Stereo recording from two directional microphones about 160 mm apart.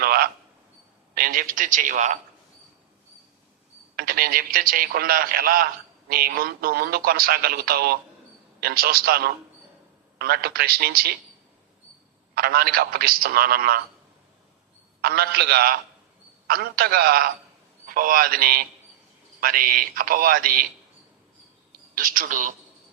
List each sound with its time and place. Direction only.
0.0 s a sound: 70° right (ahead or behind)
1.1 s a man's voice: 60° right (ahead or behind)
3.9 s a man's voice: 65° right (ahead or behind)
12.3 s speech: 70° right (ahead or behind)
15.0 s speech: 75° right (ahead or behind)
17.8 s a man's voice: 60° right (ahead or behind)
21.9 s a man's voice: 60° right (ahead or behind)